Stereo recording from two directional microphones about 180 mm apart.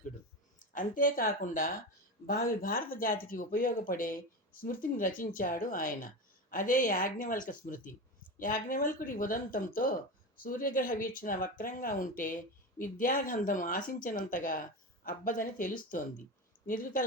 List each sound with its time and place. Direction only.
0.6 s speech: 45° left (ahead or behind)